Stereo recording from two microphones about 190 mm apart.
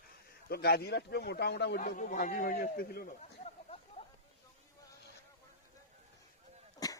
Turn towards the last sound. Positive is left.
turn(degrees=20)  # may be behind; listen again after turning